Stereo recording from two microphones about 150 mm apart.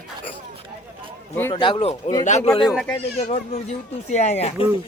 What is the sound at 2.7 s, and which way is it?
Speech, 10° left (ahead or behind).